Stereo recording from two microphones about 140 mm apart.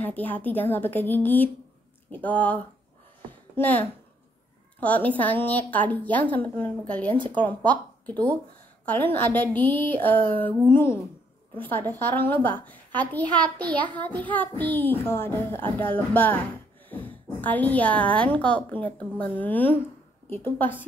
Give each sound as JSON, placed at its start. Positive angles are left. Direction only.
{"t": 0.0, "sound": "a woman's voice", "side_deg": 10}
{"t": 13.4, "sound": "a child's voice", "side_deg": -30}
{"t": 13.7, "sound": "a woman's voice", "side_deg": 10}